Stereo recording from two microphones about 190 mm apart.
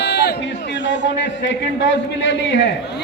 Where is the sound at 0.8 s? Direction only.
70° left (ahead or behind).